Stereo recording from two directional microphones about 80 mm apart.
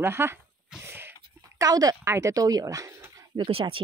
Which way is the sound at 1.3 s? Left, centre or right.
Right.